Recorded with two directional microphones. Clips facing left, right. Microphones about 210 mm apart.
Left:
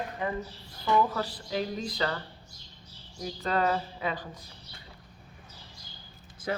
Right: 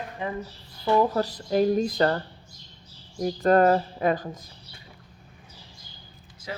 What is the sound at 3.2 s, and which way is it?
Speech, 50° right (ahead or behind).